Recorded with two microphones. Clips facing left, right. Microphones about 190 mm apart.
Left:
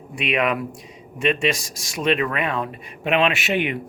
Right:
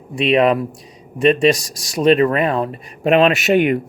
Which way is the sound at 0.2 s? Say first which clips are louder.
Right 8 dB; 35° right (ahead or behind).